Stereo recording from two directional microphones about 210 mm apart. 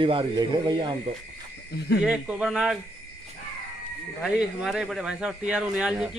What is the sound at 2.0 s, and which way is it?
Speech, 5° right (ahead or behind).